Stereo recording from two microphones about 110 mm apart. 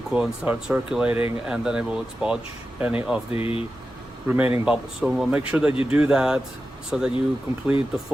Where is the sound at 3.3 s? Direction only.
60° left (ahead or behind).